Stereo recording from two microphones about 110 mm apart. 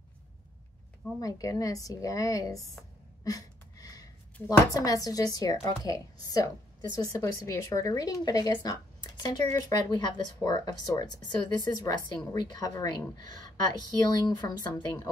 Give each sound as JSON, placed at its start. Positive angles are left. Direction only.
{"t": 1.2, "sound": "a woman's voice", "side_deg": 30}